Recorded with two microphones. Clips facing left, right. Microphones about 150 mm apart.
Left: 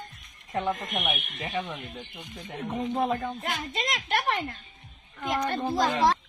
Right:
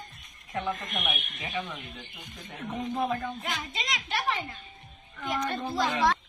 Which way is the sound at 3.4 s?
50° left (ahead or behind).